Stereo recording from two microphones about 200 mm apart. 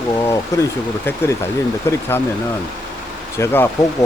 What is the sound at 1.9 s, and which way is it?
Speech, 15° left (ahead or behind).